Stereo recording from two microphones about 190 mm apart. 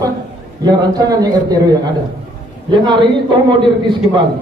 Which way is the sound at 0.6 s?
20° right (ahead or behind).